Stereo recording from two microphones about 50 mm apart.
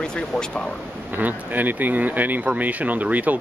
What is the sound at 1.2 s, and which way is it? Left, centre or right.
Speech, right.